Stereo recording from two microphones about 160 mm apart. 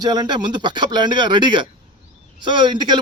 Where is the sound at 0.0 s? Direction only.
25° right (ahead or behind).